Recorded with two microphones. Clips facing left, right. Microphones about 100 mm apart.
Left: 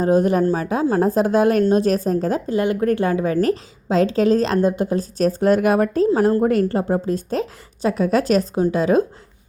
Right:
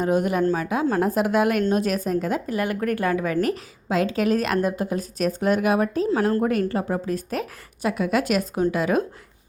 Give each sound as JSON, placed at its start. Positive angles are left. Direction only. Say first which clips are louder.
{"t": 0.0, "sound": "a woman's voice", "louder": "left 5 dB", "side_deg": 35}
{"t": 6.3, "sound": "a woman's voice", "louder": "left 4 dB", "side_deg": 30}